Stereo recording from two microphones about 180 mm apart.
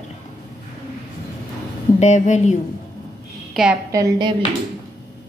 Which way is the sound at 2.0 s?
40° left (ahead or behind).